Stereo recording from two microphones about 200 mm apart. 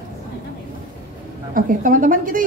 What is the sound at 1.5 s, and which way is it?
Speech, 45° right (ahead or behind).